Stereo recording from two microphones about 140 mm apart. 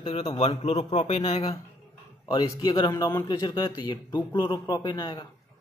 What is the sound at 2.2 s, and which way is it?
A man's voice, 25° left (ahead or behind).